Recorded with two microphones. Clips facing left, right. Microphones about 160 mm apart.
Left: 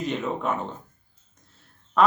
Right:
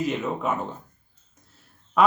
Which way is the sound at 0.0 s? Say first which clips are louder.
Right 1 dB; 5° right (ahead or behind).